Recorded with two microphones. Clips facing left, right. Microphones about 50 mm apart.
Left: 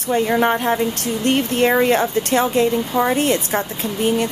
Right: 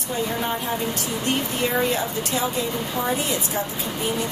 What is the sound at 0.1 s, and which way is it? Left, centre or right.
Speech, left.